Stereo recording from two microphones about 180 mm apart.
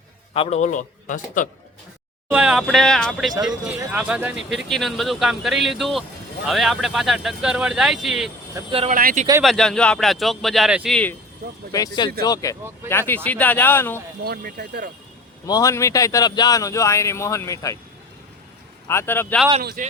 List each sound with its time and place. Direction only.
0.3 s a man's voice: 40° left (ahead or behind)
2.3 s speech: 5° right (ahead or behind)
8.9 s speech: 50° right (ahead or behind)
9.4 s speech: centre (ahead or behind)
11.7 s speech: 20° left (ahead or behind)
14.3 s speech: 60° right (ahead or behind)
15.4 s speech: 20° left (ahead or behind)
18.9 s speech: 15° left (ahead or behind)
19.8 s speech: 50° right (ahead or behind)